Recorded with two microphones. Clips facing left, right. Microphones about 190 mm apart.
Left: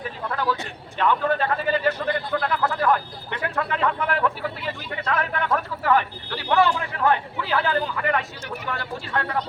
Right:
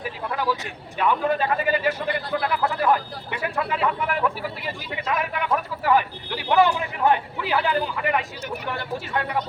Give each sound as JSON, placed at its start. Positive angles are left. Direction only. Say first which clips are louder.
{"t": 0.9, "sound": "a man's voice", "louder": "even", "side_deg": -10}